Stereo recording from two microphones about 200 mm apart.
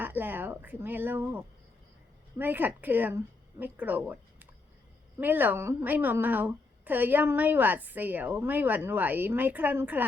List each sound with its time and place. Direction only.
0.0 s a woman's voice: 10° right (ahead or behind)